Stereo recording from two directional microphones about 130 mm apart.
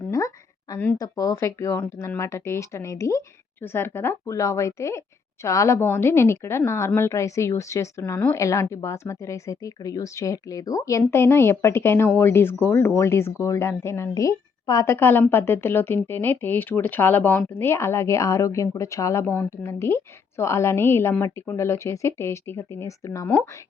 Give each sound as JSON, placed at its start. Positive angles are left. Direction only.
{"t": 0.9, "sound": "speech", "side_deg": 25}